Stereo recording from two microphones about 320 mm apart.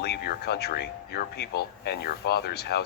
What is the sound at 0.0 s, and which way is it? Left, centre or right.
Speech, left.